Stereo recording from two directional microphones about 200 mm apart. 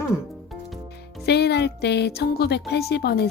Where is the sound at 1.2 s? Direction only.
55° left (ahead or behind).